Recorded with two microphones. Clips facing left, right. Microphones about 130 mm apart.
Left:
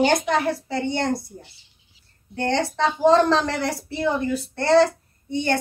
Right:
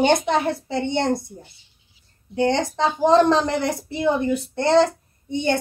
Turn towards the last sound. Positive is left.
turn(degrees=-20)  # may be behind; listen again after turning